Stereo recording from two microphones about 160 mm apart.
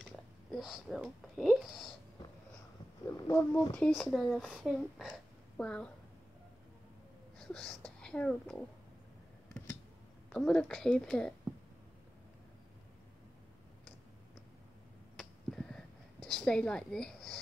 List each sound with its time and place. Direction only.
0.1 s speech: centre (ahead or behind)
3.1 s speech: 15° left (ahead or behind)
3.7 s speech: 5° left (ahead or behind)
7.3 s speech: 5° left (ahead or behind)
10.3 s a woman's voice: 5° left (ahead or behind)
15.1 s a sound: 5° left (ahead or behind)
16.3 s a woman's voice: 5° left (ahead or behind)